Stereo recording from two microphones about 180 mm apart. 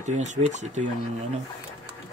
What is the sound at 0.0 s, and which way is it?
Speech, 40° right (ahead or behind).